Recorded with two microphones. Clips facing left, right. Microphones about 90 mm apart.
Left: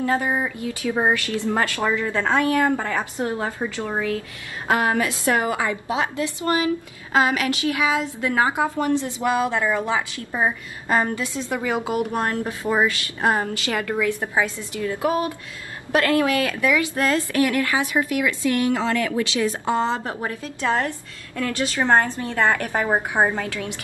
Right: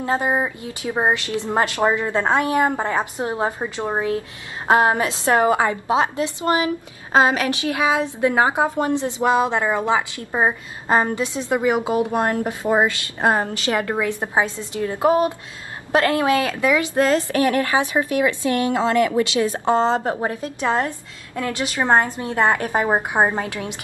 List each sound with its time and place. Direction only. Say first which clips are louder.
0.0 s a woman's voice: right 1 dB; 25° right (ahead or behind)